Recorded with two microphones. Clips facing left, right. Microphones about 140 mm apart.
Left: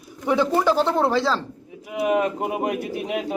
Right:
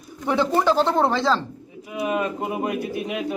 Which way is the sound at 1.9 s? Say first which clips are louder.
Left 3 dB; 70° left (ahead or behind).